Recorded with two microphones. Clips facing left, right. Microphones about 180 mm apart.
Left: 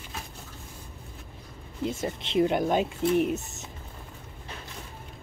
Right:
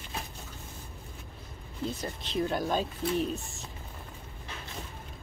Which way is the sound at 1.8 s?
25° left (ahead or behind).